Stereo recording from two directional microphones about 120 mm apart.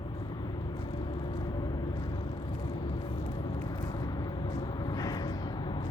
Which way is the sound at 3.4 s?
35° left (ahead or behind).